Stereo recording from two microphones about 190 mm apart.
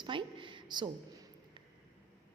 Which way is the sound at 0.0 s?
25° right (ahead or behind).